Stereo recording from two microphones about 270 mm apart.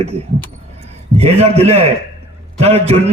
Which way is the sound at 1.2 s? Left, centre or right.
Right.